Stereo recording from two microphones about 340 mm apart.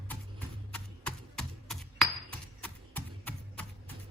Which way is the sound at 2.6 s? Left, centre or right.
Centre.